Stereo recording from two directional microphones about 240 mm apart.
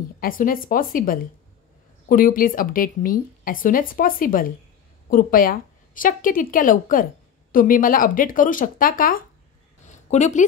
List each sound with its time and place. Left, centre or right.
0.2 s a woman's voice: left